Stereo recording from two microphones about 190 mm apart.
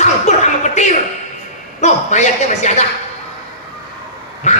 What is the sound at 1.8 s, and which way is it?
A man's voice, 35° left (ahead or behind).